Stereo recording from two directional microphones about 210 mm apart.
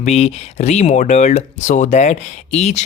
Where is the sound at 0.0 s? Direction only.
30° left (ahead or behind).